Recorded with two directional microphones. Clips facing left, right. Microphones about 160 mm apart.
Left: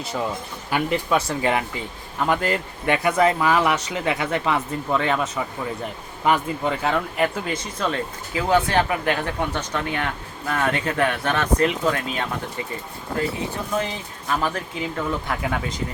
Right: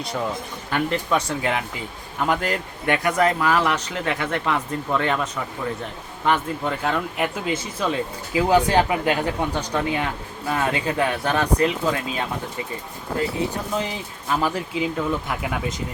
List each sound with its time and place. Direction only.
0.7 s speech: 5° left (ahead or behind)
7.4 s speech: 10° right (ahead or behind)
13.7 s speech: 15° right (ahead or behind)